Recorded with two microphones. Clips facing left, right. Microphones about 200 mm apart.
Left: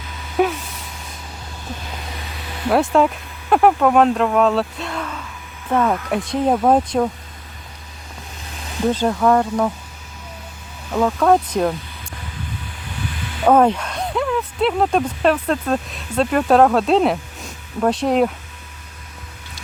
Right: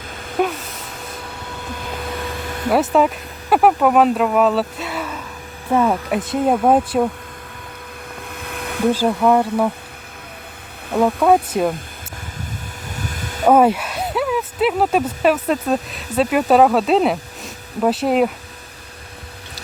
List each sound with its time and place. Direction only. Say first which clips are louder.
0.4 s speech: left 2 dB; centre (ahead or behind)
2.6 s speech: even; 5° right (ahead or behind)
8.4 s a sound: right 2 dB; 60° right (ahead or behind)
8.9 s speech: right 1 dB; 10° right (ahead or behind)
11.2 s speech: left 1 dB; 5° right (ahead or behind)
13.0 s a sound: right 1 dB; 45° right (ahead or behind)
13.5 s speech: right 1 dB; 10° right (ahead or behind)